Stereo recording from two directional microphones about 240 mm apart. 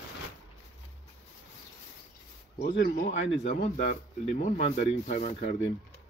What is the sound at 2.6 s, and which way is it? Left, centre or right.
Speech, left.